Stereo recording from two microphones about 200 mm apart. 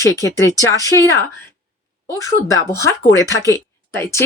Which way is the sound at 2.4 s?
45° right (ahead or behind).